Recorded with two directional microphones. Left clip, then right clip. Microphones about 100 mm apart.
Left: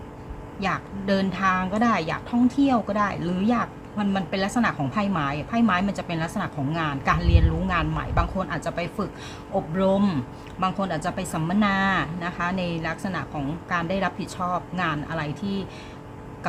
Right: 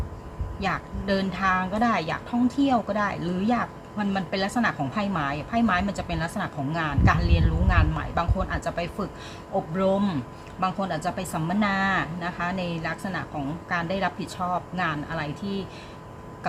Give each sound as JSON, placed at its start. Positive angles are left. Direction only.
{"t": 0.6, "sound": "a woman's voice", "side_deg": 25}